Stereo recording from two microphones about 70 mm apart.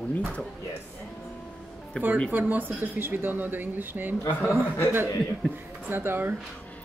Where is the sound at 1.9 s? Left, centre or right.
Centre.